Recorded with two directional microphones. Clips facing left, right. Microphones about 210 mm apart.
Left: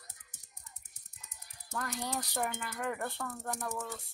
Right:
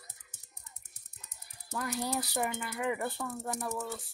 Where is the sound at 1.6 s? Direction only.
5° right (ahead or behind).